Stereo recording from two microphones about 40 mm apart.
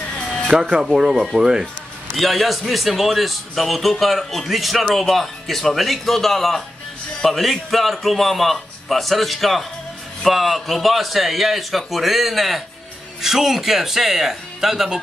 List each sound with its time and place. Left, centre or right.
0.5 s speech: right
1.2 s speech: centre
2.1 s a man's voice: centre